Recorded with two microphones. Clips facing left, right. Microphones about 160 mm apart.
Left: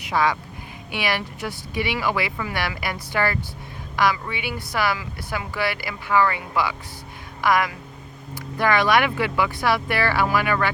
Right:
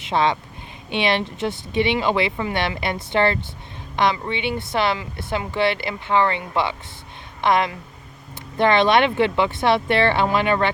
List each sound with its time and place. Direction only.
0.0 s speech: 25° right (ahead or behind)